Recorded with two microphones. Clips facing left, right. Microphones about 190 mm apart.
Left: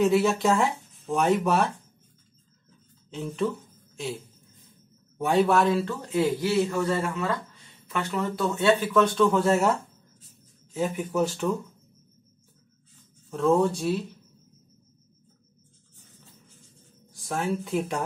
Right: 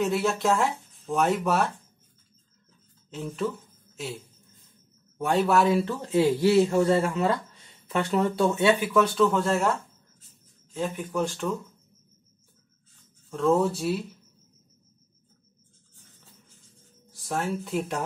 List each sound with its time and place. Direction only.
0.0 s speech: centre (ahead or behind)
3.1 s speech: centre (ahead or behind)
5.1 s speech: centre (ahead or behind)
5.8 s speech: 25° right (ahead or behind); by 9.7 s centre (ahead or behind)
10.7 s speech: 5° left (ahead or behind)
13.3 s speech: centre (ahead or behind)
17.1 s speech: centre (ahead or behind)